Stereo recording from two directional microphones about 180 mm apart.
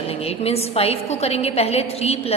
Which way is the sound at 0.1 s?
35° left (ahead or behind).